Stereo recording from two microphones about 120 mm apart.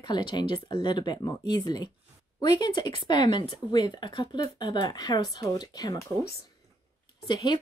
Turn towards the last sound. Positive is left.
turn(degrees=40)  # may be behind; listen again after turning